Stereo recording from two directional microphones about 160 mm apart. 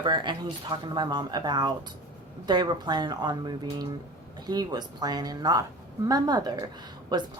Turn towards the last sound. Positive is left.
turn(degrees=-25)  # may be behind; listen again after turning